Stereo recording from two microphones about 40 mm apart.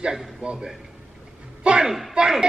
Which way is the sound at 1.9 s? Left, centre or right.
Centre.